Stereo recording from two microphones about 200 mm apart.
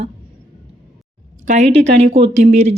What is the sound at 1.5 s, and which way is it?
Speech, 35° right (ahead or behind).